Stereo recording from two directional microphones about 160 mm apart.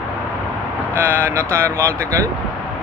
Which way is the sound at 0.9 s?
15° right (ahead or behind).